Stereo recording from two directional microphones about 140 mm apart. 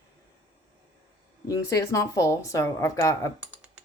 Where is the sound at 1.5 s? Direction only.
25° left (ahead or behind).